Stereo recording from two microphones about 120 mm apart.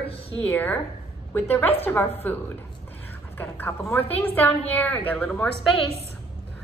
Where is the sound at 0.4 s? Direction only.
15° left (ahead or behind).